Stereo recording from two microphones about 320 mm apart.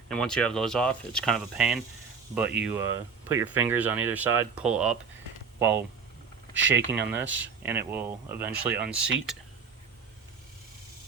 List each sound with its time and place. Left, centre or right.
0.1 s speech: centre
6.5 s speech: right
6.9 s speech: centre